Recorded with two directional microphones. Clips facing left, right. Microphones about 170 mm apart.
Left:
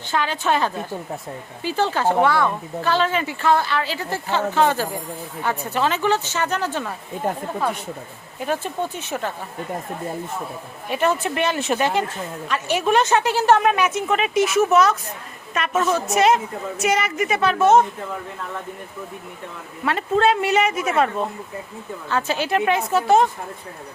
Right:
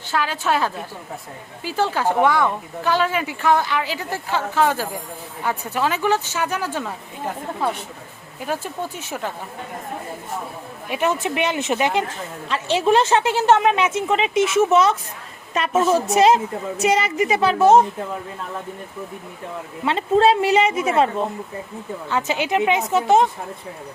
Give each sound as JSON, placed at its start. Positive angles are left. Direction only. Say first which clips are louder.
{"t": 0.1, "sound": "a woman's voice", "louder": "even", "side_deg": -5}
{"t": 8.4, "sound": "speech", "louder": "left 2 dB", "side_deg": -5}
{"t": 10.8, "sound": "a woman's voice", "louder": "left 1 dB", "side_deg": -15}
{"t": 19.8, "sound": "a woman's voice", "louder": "right 2 dB", "side_deg": -25}